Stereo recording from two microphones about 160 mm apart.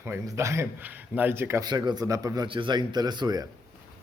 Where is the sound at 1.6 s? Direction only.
25° right (ahead or behind).